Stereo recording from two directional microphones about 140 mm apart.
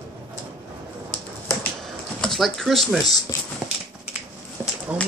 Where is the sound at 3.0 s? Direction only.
25° left (ahead or behind).